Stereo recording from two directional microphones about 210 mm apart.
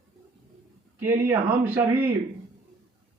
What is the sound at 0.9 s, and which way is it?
Speech, 10° right (ahead or behind).